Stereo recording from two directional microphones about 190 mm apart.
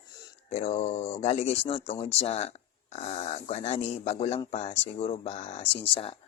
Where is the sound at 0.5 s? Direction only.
35° left (ahead or behind).